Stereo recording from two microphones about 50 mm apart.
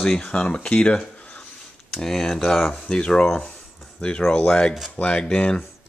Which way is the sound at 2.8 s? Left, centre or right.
Centre.